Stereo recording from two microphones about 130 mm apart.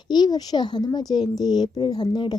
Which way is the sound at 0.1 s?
30° left (ahead or behind).